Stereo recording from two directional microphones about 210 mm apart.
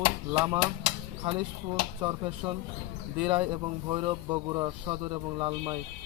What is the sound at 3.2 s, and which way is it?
Speech, 25° right (ahead or behind).